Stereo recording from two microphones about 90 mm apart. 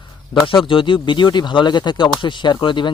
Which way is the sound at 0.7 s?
70° left (ahead or behind).